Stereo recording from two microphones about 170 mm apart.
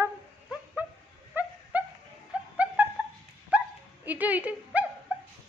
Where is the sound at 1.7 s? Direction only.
10° right (ahead or behind).